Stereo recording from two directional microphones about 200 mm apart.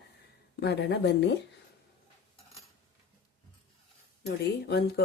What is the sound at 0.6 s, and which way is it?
Speech, 60° left (ahead or behind).